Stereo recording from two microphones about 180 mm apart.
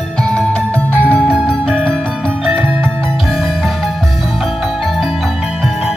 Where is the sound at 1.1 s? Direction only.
Centre (ahead or behind).